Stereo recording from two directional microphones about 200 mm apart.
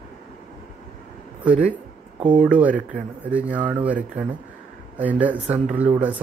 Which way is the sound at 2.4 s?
5° right (ahead or behind).